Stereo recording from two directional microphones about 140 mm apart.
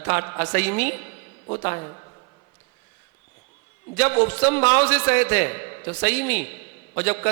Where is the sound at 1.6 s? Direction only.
35° left (ahead or behind).